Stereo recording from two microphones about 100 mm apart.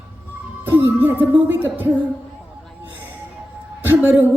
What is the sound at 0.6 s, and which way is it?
Music, 15° right (ahead or behind).